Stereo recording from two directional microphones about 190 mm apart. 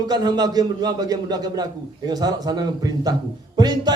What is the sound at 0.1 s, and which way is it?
A man's voice, 20° right (ahead or behind).